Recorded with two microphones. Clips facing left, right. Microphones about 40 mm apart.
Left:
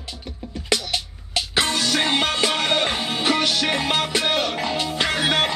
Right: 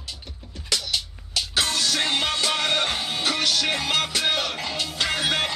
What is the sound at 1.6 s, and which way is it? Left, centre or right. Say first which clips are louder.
Music: left 3 dB; left.